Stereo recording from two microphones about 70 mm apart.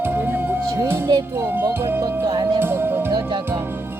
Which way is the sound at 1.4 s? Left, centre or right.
Right.